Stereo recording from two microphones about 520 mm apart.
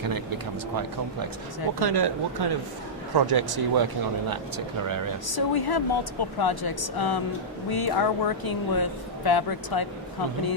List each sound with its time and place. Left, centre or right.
1.8 s speech: right
5.3 s a woman's voice: left